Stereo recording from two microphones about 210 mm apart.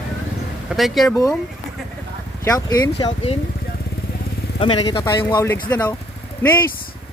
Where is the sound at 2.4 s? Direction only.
15° left (ahead or behind).